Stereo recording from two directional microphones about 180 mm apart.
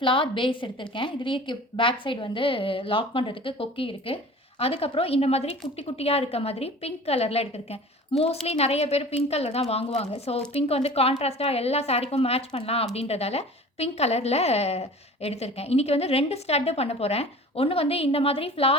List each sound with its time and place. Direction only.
0.0 s a woman's voice: 30° left (ahead or behind)